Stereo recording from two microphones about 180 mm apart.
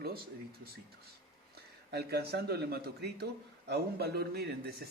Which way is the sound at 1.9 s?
65° right (ahead or behind).